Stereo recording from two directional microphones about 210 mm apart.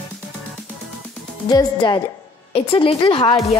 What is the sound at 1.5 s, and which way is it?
Speech, 20° left (ahead or behind).